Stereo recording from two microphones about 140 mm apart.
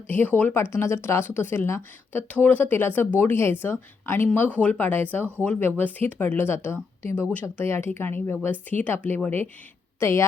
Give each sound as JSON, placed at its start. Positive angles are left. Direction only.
{"t": 0.1, "sound": "a woman's voice", "side_deg": 10}